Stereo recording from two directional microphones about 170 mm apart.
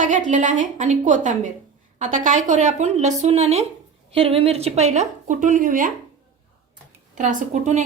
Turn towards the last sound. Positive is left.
turn(degrees=-45)  # may be behind; listen again after turning